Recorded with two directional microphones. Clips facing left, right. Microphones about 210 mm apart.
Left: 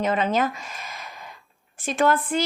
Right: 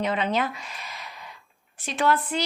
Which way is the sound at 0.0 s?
45° left (ahead or behind).